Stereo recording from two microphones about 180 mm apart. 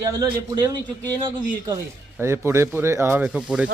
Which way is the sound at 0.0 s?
20° right (ahead or behind).